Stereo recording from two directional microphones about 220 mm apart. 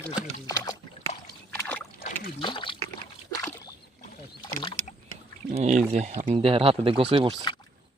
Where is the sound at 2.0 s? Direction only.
40° left (ahead or behind).